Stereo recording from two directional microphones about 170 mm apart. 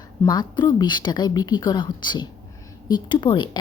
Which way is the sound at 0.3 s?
25° left (ahead or behind).